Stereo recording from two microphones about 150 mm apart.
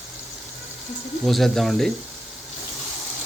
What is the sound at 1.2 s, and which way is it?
Speech, centre (ahead or behind).